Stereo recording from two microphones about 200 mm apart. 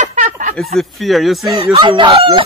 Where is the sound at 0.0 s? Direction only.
35° right (ahead or behind).